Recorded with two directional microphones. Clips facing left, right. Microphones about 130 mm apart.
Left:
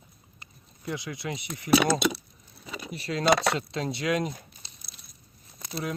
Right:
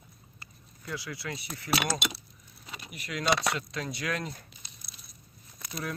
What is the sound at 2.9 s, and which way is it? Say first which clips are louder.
Speech: left 5 dB; 30° left (ahead or behind).